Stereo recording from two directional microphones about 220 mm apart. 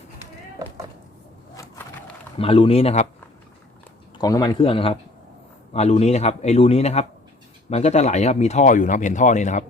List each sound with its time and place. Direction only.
2.4 s a man's voice: 25° left (ahead or behind)
4.2 s a man's voice: 15° left (ahead or behind); by 9.6 s 35° left (ahead or behind)